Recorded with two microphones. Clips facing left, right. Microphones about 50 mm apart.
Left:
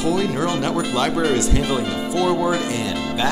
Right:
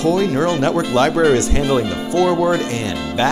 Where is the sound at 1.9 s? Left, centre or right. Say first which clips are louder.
Right 3 dB; right.